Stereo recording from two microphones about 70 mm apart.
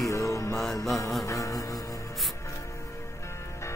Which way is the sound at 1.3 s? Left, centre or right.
Left.